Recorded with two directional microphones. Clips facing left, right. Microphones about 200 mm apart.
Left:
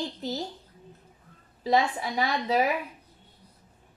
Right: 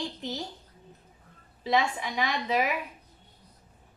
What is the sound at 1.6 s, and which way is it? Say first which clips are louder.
Speech: left 2 dB; 40° left (ahead or behind).